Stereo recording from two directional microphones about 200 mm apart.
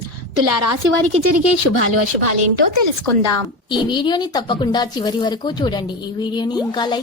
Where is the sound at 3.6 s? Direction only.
25° left (ahead or behind).